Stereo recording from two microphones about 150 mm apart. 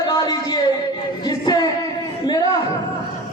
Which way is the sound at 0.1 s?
20° left (ahead or behind).